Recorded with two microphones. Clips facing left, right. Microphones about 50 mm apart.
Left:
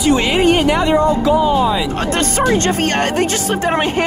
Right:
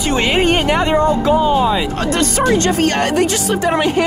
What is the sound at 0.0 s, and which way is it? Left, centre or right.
Speech, right.